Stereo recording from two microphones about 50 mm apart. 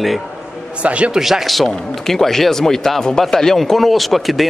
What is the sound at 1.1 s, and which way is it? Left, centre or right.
A man's voice, centre.